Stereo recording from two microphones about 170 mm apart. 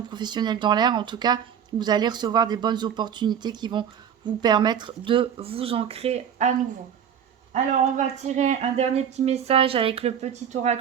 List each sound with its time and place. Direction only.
0.1 s speech: 25° right (ahead or behind)
7.5 s speech: 45° right (ahead or behind)